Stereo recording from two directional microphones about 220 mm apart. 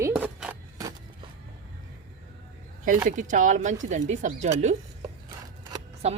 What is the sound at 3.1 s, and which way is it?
Speech, 35° right (ahead or behind).